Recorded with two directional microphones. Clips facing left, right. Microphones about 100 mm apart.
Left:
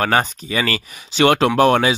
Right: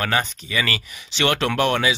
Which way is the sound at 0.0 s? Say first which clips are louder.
Left 5 dB; 40° left (ahead or behind).